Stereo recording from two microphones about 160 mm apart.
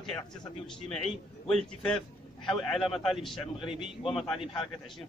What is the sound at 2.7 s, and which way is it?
Speech, centre (ahead or behind).